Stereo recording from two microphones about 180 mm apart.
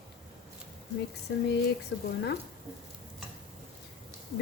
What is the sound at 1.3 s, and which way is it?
Speech, 65° left (ahead or behind).